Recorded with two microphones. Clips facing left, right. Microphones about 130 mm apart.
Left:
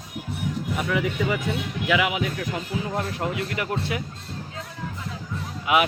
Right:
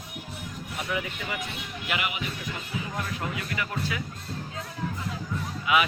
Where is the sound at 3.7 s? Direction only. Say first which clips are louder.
Left 4 dB; 30° left (ahead or behind).